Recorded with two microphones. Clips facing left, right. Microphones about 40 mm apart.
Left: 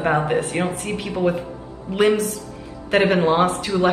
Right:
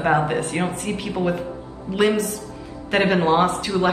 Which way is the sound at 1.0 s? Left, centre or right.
Centre.